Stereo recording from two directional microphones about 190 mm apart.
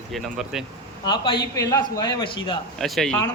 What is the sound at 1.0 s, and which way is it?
A man's voice, 25° left (ahead or behind).